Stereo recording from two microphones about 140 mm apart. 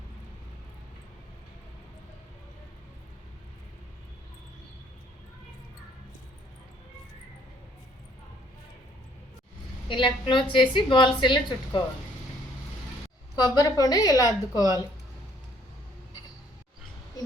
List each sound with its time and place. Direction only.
9.9 s a woman's voice: 35° left (ahead or behind)
13.3 s a woman's voice: 25° left (ahead or behind)